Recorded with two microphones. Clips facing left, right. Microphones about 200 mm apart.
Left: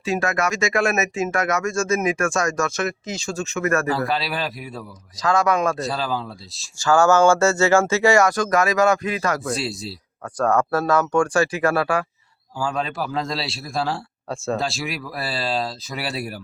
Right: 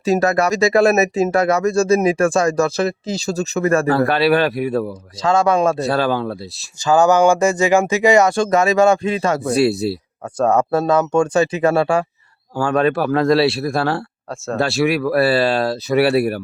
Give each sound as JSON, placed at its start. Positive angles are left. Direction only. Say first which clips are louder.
{"t": 0.0, "sound": "speech", "louder": "right 7 dB", "side_deg": -40}
{"t": 3.8, "sound": "speech", "louder": "right 8 dB", "side_deg": -60}
{"t": 5.2, "sound": "speech", "louder": "right 4 dB", "side_deg": -25}
{"t": 5.8, "sound": "speech", "louder": "right 7 dB", "side_deg": -65}
{"t": 6.7, "sound": "speech", "louder": "right 3 dB", "side_deg": -20}
{"t": 9.5, "sound": "speech", "louder": "right 11 dB", "side_deg": -65}
{"t": 10.3, "sound": "speech", "louder": "right 4 dB", "side_deg": -20}
{"t": 12.5, "sound": "speech", "louder": "right 9 dB", "side_deg": -65}
{"t": 14.3, "sound": "speech", "louder": "left 1 dB", "side_deg": 0}
{"t": 14.6, "sound": "speech", "louder": "right 11 dB", "side_deg": -65}